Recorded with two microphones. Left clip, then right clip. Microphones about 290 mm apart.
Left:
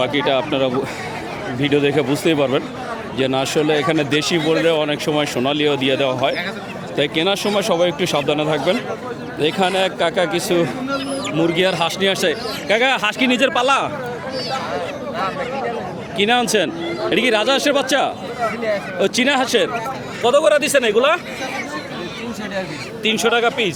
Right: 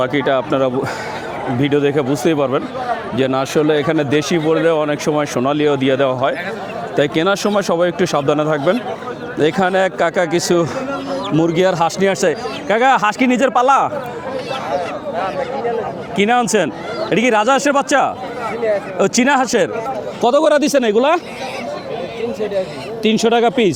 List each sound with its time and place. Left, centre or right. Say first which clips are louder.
0.3 s speech: right 2 dB; centre; by 10.7 s right
11.3 s speech: right 3 dB; right
16.1 s speech: right 2 dB; right
20.2 s a man's voice: right 1 dB; right
23.0 s speech: right 3 dB; right